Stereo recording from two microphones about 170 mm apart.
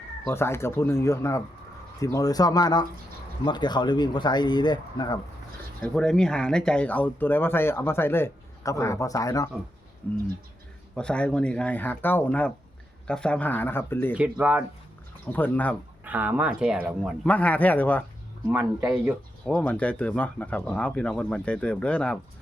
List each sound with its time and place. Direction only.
0.3 s speech: 15° left (ahead or behind)
5.8 s speech: 5° left (ahead or behind); by 9.5 s 20° left (ahead or behind)
10.0 s speech: 10° left (ahead or behind)
14.2 s speech: 10° right (ahead or behind)
15.3 s speech: 10° left (ahead or behind)
16.0 s speech: 10° right (ahead or behind)
17.2 s speech: 10° left (ahead or behind)
19.5 s speech: 5° left (ahead or behind)